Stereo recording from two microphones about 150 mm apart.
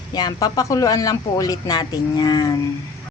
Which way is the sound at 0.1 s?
30° left (ahead or behind).